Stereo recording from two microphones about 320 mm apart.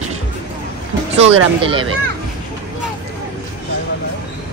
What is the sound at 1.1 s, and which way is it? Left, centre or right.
Speech, centre.